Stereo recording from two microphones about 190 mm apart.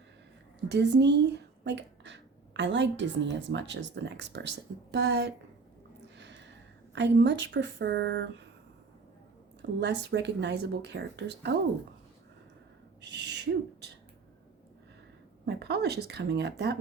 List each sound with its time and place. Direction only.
0.7 s speech: 65° right (ahead or behind)
6.1 s a sound: 65° right (ahead or behind)
6.9 s speech: 70° right (ahead or behind)
9.8 s speech: 65° right (ahead or behind)
13.0 s speech: 65° right (ahead or behind)
15.4 s speech: 60° right (ahead or behind)